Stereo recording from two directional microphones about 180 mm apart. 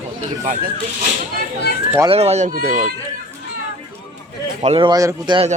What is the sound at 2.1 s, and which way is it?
Speech, 35° right (ahead or behind).